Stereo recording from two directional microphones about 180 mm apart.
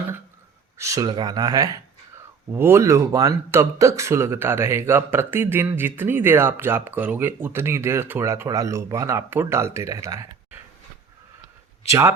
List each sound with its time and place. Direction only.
0.8 s speech: 15° right (ahead or behind)
11.9 s speech: 15° right (ahead or behind)